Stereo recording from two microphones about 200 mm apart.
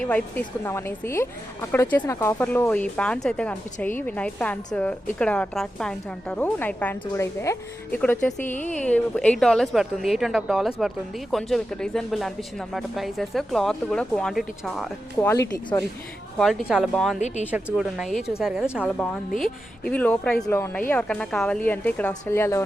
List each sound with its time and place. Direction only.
0.0 s a woman's voice: 5° left (ahead or behind)
15.2 s speech: 15° left (ahead or behind)
16.4 s a woman's voice: centre (ahead or behind)
17.2 s speech: 35° left (ahead or behind)
17.5 s a woman's voice: 5° right (ahead or behind); by 22.6 s 15° left (ahead or behind)